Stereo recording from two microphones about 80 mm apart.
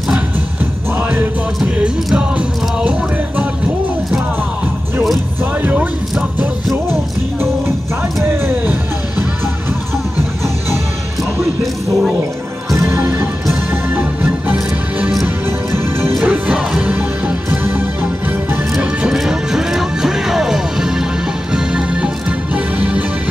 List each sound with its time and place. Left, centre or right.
0.9 s music: right
5.6 s music: centre
12.7 s music: right; by 15.1 s centre
15.2 s music: right
16.3 s music: centre